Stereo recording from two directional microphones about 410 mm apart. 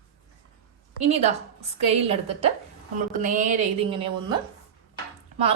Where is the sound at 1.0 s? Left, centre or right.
Centre.